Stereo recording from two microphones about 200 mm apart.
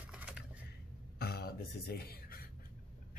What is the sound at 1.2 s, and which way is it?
Speech, 50° left (ahead or behind).